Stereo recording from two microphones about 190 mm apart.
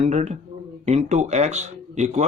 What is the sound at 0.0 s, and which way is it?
Speech, 35° right (ahead or behind).